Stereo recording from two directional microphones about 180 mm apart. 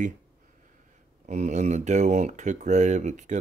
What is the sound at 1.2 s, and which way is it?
Speech, 40° right (ahead or behind).